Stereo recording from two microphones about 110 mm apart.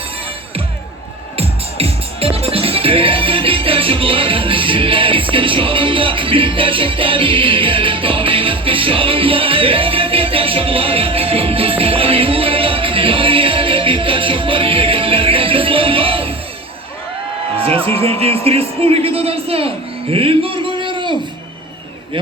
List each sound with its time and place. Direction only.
1.4 s music: 60° right (ahead or behind)
17.6 s speech: 60° right (ahead or behind)